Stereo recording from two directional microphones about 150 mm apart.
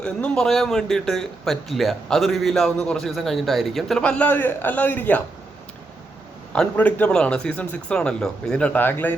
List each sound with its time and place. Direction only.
0.0 s speech: 5° left (ahead or behind)
6.5 s a man's voice: 10° left (ahead or behind)